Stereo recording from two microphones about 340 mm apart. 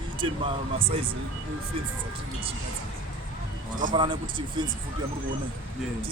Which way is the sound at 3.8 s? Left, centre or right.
Centre.